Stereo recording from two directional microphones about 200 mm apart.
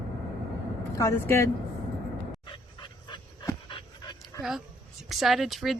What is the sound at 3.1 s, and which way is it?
Dog, 20° left (ahead or behind).